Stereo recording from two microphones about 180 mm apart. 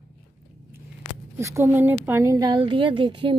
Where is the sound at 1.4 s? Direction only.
15° right (ahead or behind).